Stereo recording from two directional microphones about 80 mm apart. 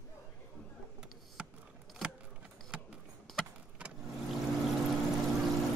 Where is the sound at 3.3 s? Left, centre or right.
Centre.